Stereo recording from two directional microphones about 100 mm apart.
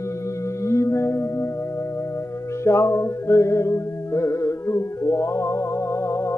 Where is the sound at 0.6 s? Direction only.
30° left (ahead or behind).